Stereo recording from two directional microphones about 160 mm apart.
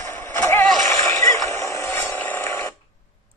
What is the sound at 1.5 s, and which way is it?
Mechanisms, 20° left (ahead or behind).